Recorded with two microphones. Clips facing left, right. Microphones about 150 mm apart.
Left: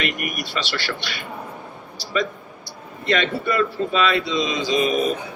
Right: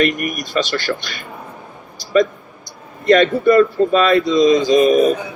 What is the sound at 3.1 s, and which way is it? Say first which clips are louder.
A man's voice: right 10 dB; 45° right (ahead or behind).